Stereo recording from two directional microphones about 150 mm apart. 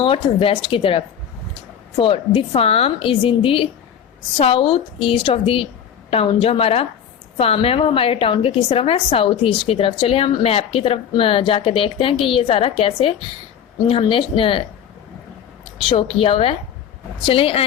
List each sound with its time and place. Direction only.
0.0 s a woman's voice: 35° left (ahead or behind)
16.1 s a woman's voice: 40° left (ahead or behind)